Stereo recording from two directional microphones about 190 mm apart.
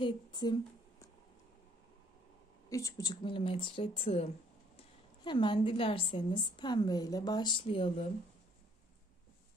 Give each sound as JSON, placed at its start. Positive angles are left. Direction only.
{"t": 0.0, "sound": "speech", "side_deg": 25}
{"t": 2.7, "sound": "a woman's voice", "side_deg": 20}